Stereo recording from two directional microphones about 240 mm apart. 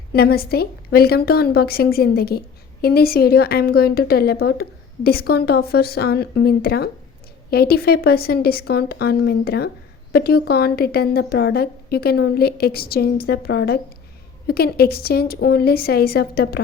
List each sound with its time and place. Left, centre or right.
0.1 s a woman's voice: left